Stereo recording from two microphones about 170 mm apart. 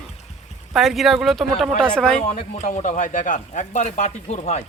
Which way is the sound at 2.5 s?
45° left (ahead or behind).